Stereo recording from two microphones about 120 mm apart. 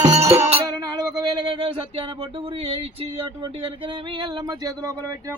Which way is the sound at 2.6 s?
50° right (ahead or behind).